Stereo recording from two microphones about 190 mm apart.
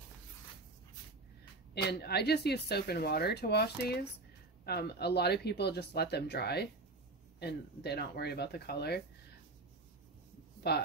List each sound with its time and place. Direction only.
1.9 s speech: 55° left (ahead or behind)
10.7 s speech: 60° left (ahead or behind)